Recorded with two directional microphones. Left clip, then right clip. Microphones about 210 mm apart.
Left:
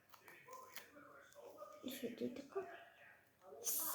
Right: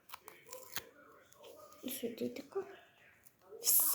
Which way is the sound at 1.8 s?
25° right (ahead or behind).